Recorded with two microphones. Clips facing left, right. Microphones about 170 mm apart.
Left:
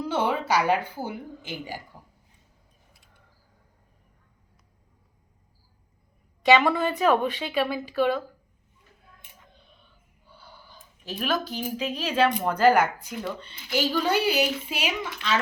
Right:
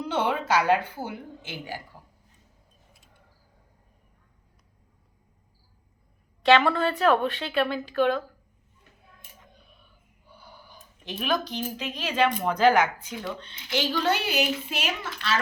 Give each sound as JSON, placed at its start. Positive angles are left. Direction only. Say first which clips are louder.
{"t": 0.0, "sound": "speech", "louder": "left 1 dB", "side_deg": 10}
{"t": 6.4, "sound": "speech", "louder": "even", "side_deg": 15}
{"t": 10.2, "sound": "a sound", "louder": "right 1 dB", "side_deg": -15}
{"t": 11.0, "sound": "speech", "louder": "even", "side_deg": 0}